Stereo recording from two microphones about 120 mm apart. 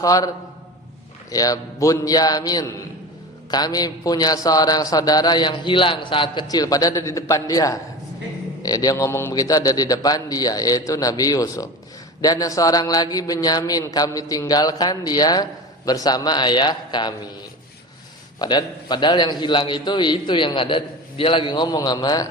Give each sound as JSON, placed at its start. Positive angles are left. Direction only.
{"t": 0.0, "sound": "a man's voice", "side_deg": 30}
{"t": 1.3, "sound": "a man's voice", "side_deg": 30}
{"t": 18.3, "sound": "a man's voice", "side_deg": 35}